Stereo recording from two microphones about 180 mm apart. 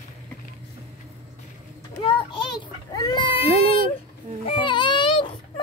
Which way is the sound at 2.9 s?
25° left (ahead or behind).